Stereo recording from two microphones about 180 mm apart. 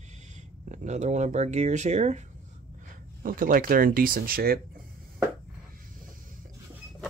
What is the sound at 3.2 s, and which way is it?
Speech, 50° right (ahead or behind).